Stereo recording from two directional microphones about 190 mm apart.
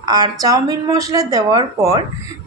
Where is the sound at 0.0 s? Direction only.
20° right (ahead or behind).